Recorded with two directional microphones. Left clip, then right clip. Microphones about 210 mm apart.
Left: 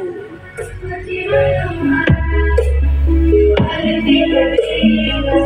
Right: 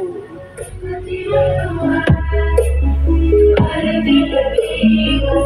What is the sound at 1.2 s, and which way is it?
Music, 50° right (ahead or behind).